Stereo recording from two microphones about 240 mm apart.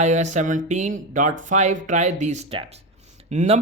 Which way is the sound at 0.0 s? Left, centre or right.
Right.